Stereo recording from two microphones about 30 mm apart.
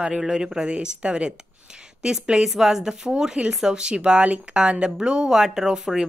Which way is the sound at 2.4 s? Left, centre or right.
Centre.